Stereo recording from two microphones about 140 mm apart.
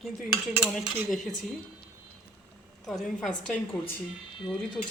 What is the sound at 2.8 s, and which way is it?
Speech, 5° left (ahead or behind).